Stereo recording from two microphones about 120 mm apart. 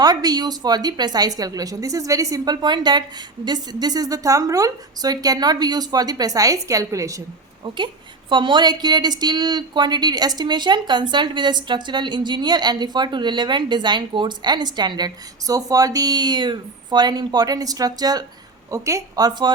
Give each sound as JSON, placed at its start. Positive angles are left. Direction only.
{"t": 0.0, "sound": "speech", "side_deg": -35}
{"t": 8.3, "sound": "speech", "side_deg": -40}